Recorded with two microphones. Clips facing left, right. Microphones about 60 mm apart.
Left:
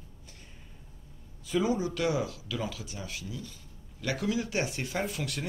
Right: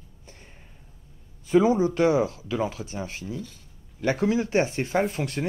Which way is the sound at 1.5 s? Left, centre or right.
Right.